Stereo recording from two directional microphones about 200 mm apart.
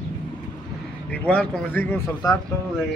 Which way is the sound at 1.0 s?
5° left (ahead or behind).